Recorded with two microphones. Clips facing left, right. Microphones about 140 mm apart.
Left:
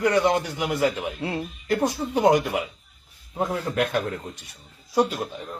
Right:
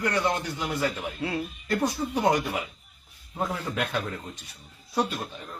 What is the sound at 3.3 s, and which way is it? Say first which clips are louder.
Speech: left 5 dB; 5° left (ahead or behind).